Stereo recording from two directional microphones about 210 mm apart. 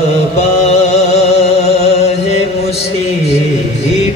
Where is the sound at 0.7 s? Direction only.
30° left (ahead or behind).